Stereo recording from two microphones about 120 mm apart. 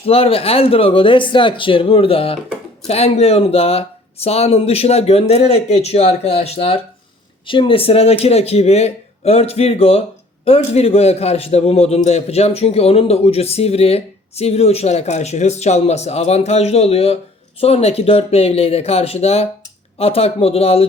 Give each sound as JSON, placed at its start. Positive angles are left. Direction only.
{"t": 0.0, "sound": "a man's voice", "side_deg": 50}
{"t": 7.4, "sound": "a man's voice", "side_deg": 45}